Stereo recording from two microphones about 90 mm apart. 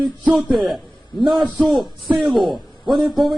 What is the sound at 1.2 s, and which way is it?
Speech, centre (ahead or behind).